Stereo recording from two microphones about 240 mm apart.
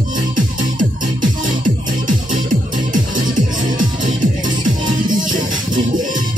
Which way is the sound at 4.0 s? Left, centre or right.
Right.